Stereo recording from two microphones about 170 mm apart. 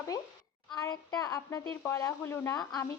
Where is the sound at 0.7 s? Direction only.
20° left (ahead or behind).